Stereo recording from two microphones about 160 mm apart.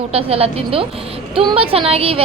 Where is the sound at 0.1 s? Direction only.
35° right (ahead or behind).